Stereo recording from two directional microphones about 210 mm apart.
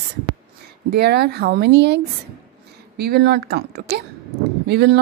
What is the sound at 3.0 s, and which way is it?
A woman's voice, 50° right (ahead or behind).